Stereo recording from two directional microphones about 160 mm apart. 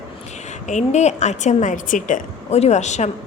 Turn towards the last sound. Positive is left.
turn(degrees=45)  # may be behind; listen again after turning